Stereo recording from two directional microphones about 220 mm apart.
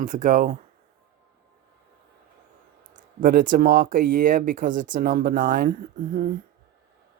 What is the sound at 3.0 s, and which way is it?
Speech, 40° right (ahead or behind).